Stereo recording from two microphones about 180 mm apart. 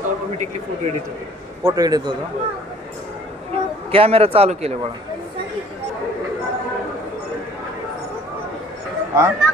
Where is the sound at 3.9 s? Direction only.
30° right (ahead or behind).